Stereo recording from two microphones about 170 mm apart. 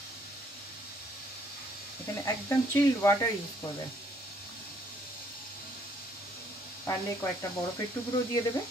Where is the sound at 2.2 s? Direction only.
15° left (ahead or behind).